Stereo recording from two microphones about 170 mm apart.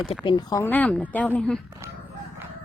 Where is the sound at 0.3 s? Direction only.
25° left (ahead or behind).